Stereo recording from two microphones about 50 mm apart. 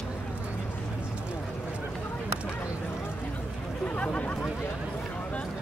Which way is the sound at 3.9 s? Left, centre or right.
Left.